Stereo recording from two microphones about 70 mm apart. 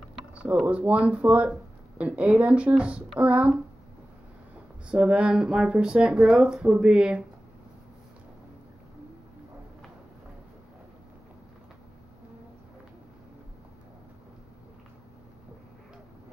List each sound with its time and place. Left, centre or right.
0.3 s speech: centre
4.8 s speech: centre